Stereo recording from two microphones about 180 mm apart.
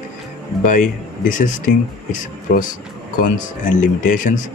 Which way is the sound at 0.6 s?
45° left (ahead or behind).